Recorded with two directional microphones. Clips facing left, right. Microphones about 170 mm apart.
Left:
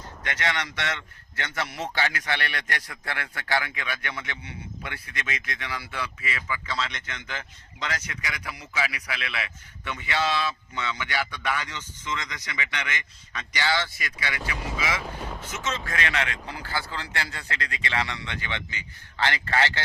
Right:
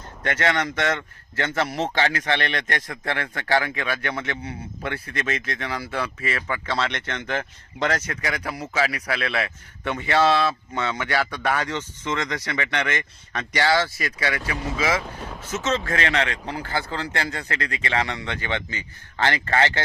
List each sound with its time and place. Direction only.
0.3 s speech: 50° right (ahead or behind)
2.0 s a man's voice: 35° right (ahead or behind); by 9.0 s 50° right (ahead or behind)
9.0 s a man's voice: 30° right (ahead or behind)
9.2 s speech: 50° right (ahead or behind)
14.0 s a man's voice: 35° right (ahead or behind)
15.2 s boat: centre (ahead or behind)
15.8 s a man's voice: 35° right (ahead or behind)